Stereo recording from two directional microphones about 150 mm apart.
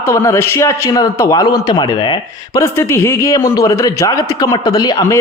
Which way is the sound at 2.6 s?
15° left (ahead or behind).